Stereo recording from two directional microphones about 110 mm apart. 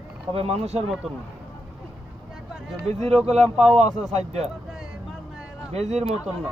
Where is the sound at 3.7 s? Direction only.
90° right.